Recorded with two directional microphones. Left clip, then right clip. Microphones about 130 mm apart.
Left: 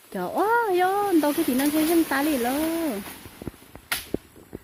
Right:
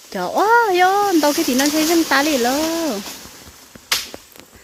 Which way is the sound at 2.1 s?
5° right (ahead or behind).